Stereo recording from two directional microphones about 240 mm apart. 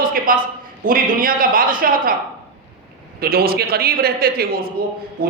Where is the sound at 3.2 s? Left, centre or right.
Right.